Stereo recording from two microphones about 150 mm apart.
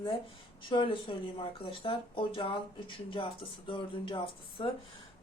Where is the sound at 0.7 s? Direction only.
35° left (ahead or behind).